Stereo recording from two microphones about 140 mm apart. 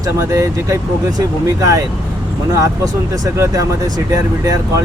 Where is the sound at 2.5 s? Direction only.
25° right (ahead or behind).